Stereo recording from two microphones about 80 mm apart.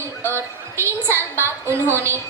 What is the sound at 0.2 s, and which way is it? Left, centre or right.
A woman's voice, right.